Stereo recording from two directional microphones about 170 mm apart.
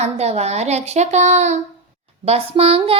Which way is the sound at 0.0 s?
40° right (ahead or behind).